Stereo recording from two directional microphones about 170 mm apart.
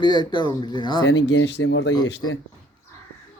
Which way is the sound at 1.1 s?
90° left.